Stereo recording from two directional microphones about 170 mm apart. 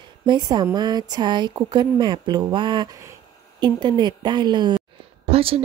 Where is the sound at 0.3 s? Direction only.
25° right (ahead or behind).